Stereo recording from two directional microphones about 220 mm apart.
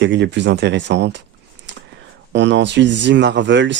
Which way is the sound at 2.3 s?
55° right (ahead or behind).